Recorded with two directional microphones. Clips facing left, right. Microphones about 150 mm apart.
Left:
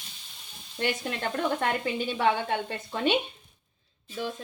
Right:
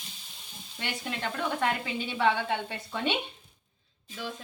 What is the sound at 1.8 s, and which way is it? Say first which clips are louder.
A woman's voice: left 2 dB; 50° left (ahead or behind).